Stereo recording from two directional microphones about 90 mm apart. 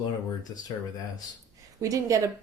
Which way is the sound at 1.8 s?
40° right (ahead or behind).